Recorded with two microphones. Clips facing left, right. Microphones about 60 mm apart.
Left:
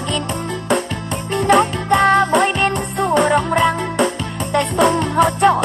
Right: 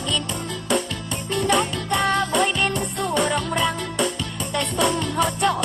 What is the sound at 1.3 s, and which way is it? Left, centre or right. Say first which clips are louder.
Music: left 7 dB; left.